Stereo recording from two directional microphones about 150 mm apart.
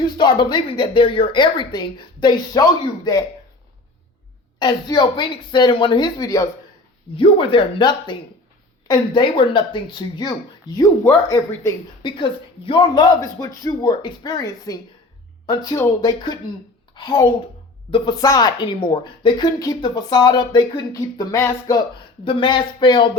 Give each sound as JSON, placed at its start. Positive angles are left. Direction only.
{"t": 0.2, "sound": "speech", "side_deg": 30}
{"t": 4.6, "sound": "speech", "side_deg": 30}
{"t": 7.2, "sound": "speech", "side_deg": 35}
{"t": 12.0, "sound": "a woman's voice", "side_deg": 35}